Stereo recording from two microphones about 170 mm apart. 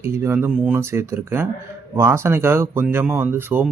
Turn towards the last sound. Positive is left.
turn(degrees=-10)  # may be behind; listen again after turning